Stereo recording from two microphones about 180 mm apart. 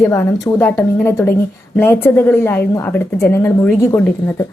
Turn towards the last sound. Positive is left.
turn(degrees=15)  # may be behind; listen again after turning